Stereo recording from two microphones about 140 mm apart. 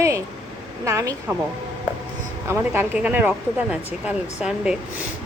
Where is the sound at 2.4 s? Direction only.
15° right (ahead or behind).